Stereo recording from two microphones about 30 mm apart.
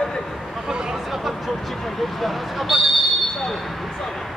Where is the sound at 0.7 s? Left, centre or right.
Right.